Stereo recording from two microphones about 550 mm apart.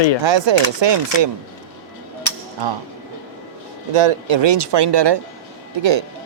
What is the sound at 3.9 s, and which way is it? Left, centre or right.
Speech, right.